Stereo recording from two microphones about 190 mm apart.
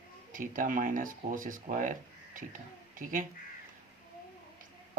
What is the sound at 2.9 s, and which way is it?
Speech, 45° right (ahead or behind).